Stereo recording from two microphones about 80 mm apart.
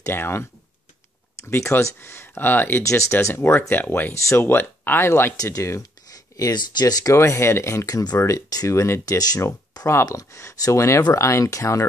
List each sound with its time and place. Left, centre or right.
0.1 s speech: left
2.8 s speech: left
5.4 s speech: left
7.2 s speech: left
7.8 s speech: left
8.2 s speech: left
9.0 s speech: left